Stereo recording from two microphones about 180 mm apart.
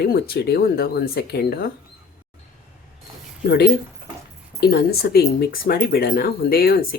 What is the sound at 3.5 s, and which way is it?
Speech, 60° left (ahead or behind).